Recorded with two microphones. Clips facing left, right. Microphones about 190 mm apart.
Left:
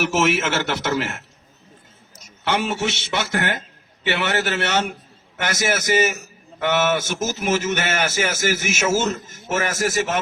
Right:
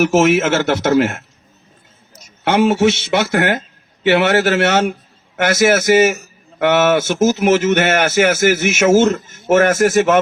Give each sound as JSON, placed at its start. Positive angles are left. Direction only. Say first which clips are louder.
{"t": 0.0, "sound": "speech", "louder": "right 7 dB", "side_deg": -40}
{"t": 2.4, "sound": "a man's voice", "louder": "right 10 dB", "side_deg": -55}